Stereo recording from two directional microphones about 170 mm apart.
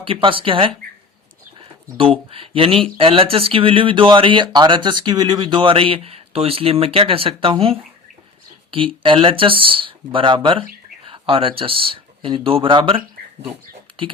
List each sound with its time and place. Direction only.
0.0 s speech: 30° right (ahead or behind)